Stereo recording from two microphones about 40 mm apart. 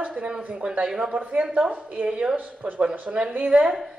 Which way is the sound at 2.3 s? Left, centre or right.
Right.